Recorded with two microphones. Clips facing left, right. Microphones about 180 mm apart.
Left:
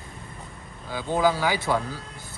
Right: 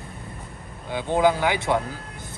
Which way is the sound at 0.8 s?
20° right (ahead or behind).